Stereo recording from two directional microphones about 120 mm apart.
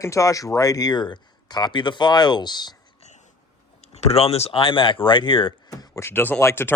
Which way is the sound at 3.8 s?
65° left (ahead or behind).